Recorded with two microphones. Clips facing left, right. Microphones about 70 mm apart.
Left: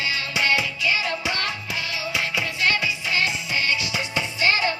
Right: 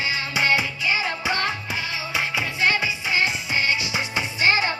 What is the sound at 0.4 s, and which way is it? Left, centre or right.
Music, right.